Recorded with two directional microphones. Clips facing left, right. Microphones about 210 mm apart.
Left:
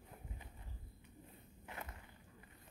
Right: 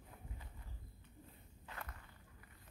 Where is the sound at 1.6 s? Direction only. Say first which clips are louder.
Left 2 dB; 20° left (ahead or behind).